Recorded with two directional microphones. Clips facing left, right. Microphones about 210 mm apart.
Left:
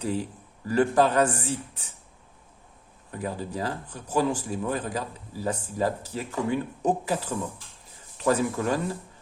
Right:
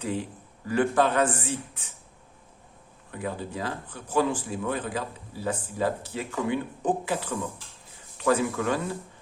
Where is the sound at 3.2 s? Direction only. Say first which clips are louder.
Left 1 dB; 40° left (ahead or behind).